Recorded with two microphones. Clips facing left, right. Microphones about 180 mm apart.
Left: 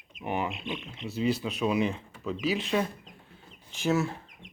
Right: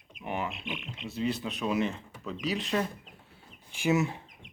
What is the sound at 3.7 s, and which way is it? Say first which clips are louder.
Speech: even; 15° right (ahead or behind).